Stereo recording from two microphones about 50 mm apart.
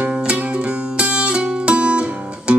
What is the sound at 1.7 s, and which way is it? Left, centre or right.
Music, right.